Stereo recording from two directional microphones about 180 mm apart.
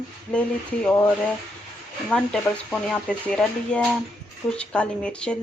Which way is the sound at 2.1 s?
5° left (ahead or behind).